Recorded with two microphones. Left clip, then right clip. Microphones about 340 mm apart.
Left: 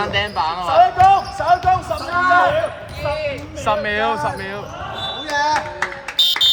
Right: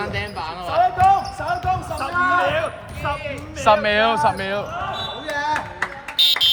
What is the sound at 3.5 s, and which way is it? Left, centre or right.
Speech, right.